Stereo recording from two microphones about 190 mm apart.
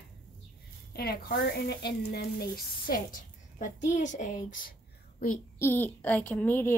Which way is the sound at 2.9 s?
45° left (ahead or behind).